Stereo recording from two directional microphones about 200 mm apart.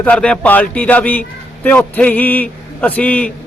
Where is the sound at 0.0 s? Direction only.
5° left (ahead or behind).